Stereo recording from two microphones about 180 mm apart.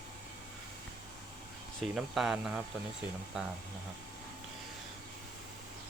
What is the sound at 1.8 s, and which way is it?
Speech, centre (ahead or behind).